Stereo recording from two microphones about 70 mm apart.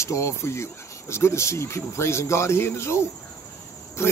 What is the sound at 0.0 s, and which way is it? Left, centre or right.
Speech, left.